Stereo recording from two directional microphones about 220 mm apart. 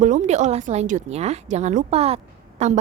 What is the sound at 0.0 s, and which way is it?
A woman's voice, 35° right (ahead or behind).